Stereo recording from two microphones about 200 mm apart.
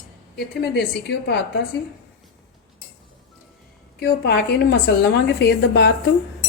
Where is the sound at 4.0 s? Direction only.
55° left (ahead or behind).